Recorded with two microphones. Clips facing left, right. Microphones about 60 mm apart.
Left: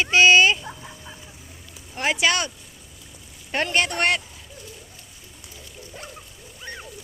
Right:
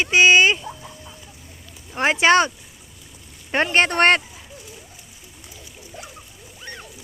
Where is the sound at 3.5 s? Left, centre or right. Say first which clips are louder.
Right 4 dB; right.